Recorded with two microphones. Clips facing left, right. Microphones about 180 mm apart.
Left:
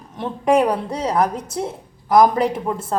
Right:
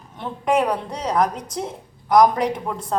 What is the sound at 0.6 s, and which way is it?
A woman's voice, 5° left (ahead or behind).